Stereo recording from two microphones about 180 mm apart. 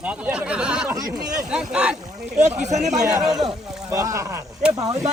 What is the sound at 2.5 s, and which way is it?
Speech, 40° right (ahead or behind).